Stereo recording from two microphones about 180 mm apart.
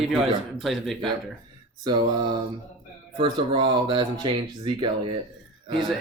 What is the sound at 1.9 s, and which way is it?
Speech, 25° right (ahead or behind).